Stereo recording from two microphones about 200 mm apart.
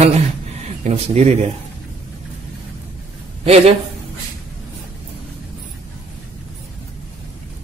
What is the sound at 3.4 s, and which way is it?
Speech, 30° right (ahead or behind).